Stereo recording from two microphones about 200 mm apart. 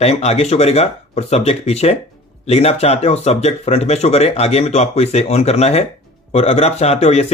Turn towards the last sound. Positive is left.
turn(degrees=30)  # may be behind; listen again after turning